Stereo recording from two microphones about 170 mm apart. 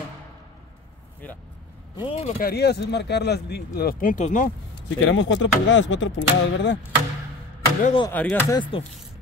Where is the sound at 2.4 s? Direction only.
70° left (ahead or behind); by 4.5 s 50° left (ahead or behind).